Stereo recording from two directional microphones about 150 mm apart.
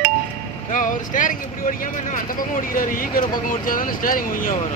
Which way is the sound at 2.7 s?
65° left (ahead or behind).